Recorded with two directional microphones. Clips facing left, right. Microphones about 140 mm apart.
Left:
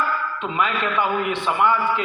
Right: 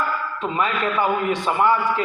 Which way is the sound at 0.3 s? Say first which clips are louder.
Right 2 dB; 35° right (ahead or behind).